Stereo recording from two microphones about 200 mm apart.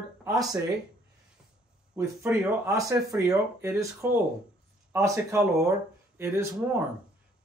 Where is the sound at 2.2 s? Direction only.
15° right (ahead or behind).